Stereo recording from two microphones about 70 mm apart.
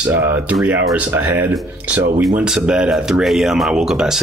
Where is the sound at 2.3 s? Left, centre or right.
Centre.